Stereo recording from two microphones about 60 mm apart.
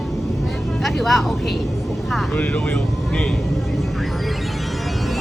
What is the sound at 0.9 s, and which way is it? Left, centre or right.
Speech, centre.